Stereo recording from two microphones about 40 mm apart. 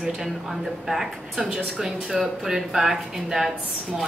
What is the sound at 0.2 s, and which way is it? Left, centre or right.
Speech, centre.